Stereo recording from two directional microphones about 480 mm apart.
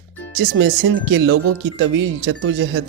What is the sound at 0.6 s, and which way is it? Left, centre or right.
Speech, right.